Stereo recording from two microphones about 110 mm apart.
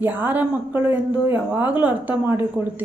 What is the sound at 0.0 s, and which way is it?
Speech, 15° right (ahead or behind).